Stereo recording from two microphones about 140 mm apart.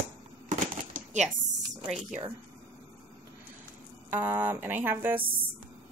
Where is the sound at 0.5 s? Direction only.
60° right (ahead or behind).